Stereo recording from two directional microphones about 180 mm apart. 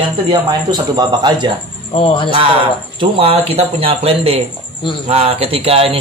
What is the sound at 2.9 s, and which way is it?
Speech, 30° right (ahead or behind).